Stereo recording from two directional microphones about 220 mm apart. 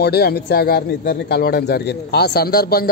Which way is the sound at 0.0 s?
45° left (ahead or behind).